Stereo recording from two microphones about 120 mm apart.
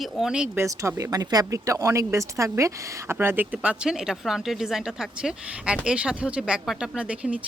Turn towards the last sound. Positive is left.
turn(degrees=-10)  # may be behind; listen again after turning